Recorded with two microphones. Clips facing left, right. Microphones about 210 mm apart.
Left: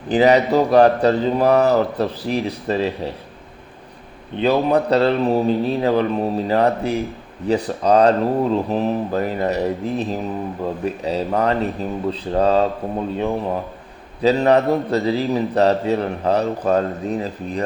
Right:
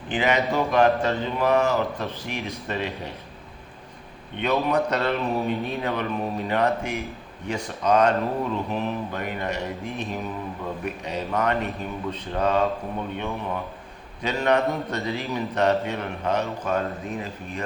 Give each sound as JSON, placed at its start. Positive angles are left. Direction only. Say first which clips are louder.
{"t": 0.1, "sound": "a man's voice", "louder": "left 9 dB", "side_deg": 35}
{"t": 4.4, "sound": "a man's voice", "louder": "left 6 dB", "side_deg": 30}